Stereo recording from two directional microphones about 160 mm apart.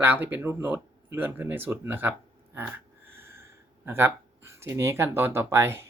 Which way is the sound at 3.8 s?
15° right (ahead or behind).